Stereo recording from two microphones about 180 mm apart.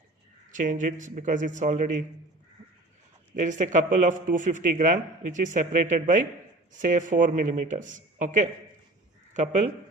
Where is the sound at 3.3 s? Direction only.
45° right (ahead or behind).